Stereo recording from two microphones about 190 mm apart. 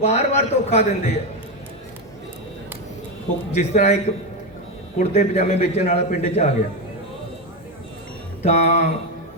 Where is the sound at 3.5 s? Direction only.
35° left (ahead or behind).